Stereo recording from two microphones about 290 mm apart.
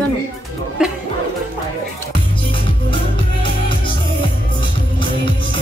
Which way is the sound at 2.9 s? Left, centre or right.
Centre.